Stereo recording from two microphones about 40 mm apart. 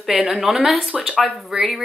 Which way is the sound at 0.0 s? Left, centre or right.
Centre.